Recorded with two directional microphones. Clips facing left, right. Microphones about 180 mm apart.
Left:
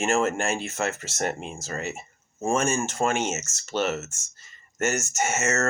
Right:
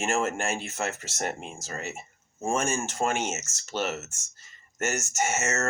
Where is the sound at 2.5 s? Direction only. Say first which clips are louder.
Left 3 dB; 15° right (ahead or behind).